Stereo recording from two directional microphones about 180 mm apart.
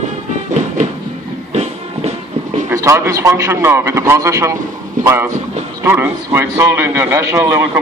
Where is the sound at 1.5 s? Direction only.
35° right (ahead or behind).